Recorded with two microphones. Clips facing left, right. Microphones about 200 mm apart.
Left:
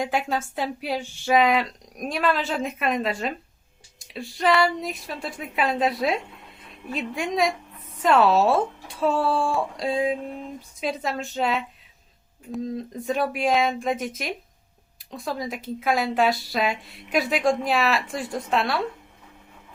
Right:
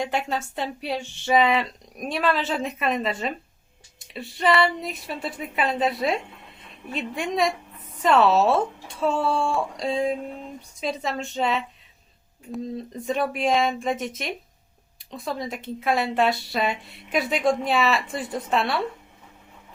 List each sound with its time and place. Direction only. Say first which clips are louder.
0.0 s speech: left 1 dB; centre (ahead or behind)